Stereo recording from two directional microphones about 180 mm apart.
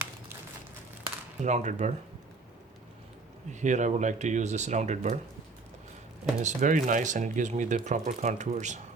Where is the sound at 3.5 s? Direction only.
40° right (ahead or behind).